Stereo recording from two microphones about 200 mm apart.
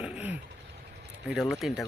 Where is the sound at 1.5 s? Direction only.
Centre (ahead or behind).